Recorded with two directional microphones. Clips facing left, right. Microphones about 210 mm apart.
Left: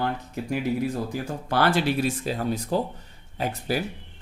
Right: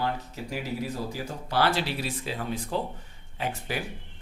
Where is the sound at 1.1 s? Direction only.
55° left (ahead or behind).